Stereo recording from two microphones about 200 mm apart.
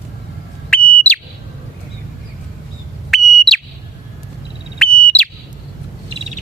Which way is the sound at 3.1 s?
Centre (ahead or behind).